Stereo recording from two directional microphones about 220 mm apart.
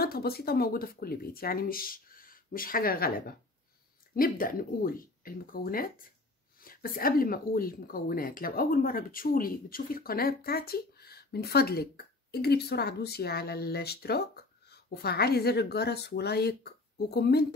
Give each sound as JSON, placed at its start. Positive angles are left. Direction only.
{"t": 0.0, "sound": "speech", "side_deg": 45}